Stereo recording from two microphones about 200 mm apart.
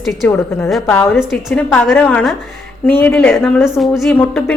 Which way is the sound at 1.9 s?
10° left (ahead or behind).